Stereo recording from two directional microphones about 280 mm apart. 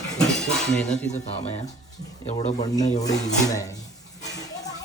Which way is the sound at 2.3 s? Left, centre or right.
Left.